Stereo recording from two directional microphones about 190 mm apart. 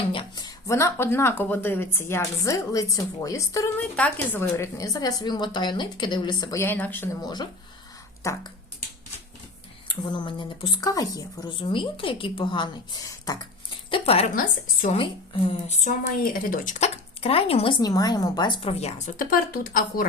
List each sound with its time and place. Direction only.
0.1 s speech: 25° left (ahead or behind)
9.9 s speech: 25° left (ahead or behind)
13.9 s a woman's voice: 30° left (ahead or behind)
15.4 s a woman's voice: 40° left (ahead or behind)